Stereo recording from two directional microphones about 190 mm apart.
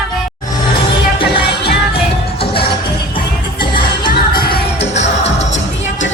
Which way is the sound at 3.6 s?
25° left (ahead or behind).